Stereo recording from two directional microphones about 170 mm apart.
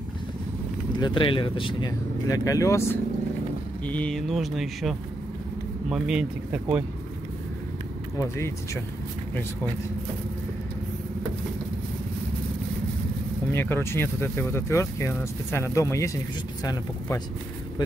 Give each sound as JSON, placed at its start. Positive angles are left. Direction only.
{"t": 0.9, "sound": "speech", "side_deg": 30}
{"t": 3.8, "sound": "speech", "side_deg": 5}
{"t": 8.2, "sound": "speech", "side_deg": 15}
{"t": 13.5, "sound": "speech", "side_deg": 15}